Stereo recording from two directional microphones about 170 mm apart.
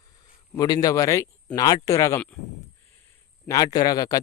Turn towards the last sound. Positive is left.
turn(degrees=20)  # may be behind; listen again after turning